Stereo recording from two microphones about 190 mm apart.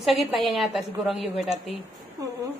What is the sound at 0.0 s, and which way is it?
A woman's voice, centre (ahead or behind).